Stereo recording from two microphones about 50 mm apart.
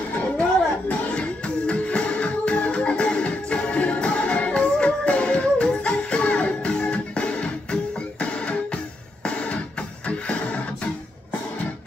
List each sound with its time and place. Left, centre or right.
0.4 s music: left